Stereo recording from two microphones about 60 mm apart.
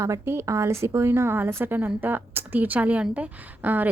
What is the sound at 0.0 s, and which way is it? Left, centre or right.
A woman's voice, right.